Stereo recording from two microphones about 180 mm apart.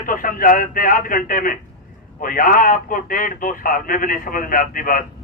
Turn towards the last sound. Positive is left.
turn(degrees=50)  # may be behind; listen again after turning